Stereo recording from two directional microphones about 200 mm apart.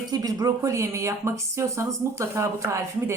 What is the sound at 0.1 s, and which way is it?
Speech, 20° right (ahead or behind).